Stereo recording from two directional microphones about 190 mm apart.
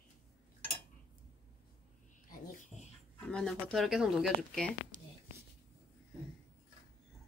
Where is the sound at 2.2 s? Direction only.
40° left (ahead or behind).